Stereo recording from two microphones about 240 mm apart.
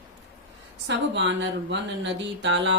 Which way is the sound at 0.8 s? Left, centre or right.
Right.